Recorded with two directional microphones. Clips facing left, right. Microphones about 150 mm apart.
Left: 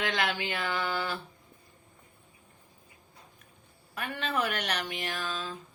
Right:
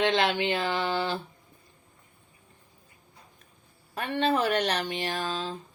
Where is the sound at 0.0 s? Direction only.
25° right (ahead or behind).